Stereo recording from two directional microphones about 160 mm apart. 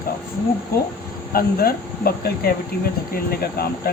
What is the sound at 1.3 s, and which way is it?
Speech, 70° left (ahead or behind).